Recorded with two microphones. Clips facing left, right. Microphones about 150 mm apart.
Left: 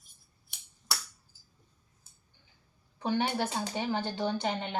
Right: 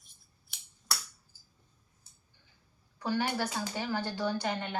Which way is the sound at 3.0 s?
25° left (ahead or behind).